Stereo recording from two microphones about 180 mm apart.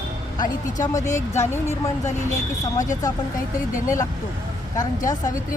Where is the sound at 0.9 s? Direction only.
15° left (ahead or behind).